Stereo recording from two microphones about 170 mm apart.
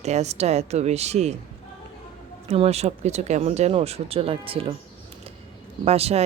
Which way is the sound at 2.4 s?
35° right (ahead or behind).